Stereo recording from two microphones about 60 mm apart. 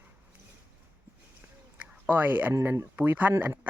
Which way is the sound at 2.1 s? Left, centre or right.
Right.